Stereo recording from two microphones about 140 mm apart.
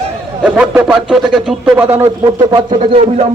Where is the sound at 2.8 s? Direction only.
50° right (ahead or behind).